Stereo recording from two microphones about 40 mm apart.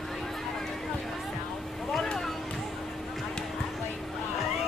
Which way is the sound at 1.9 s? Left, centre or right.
Centre.